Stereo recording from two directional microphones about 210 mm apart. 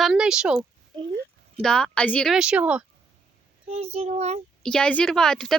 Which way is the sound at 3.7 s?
30° right (ahead or behind).